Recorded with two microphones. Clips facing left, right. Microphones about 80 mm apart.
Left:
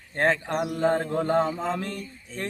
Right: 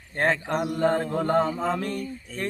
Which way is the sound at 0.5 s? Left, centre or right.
Centre.